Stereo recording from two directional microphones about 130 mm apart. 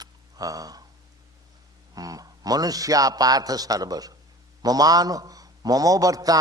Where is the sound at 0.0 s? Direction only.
30° right (ahead or behind).